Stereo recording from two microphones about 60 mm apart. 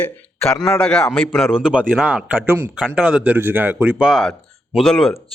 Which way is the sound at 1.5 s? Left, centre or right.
Centre.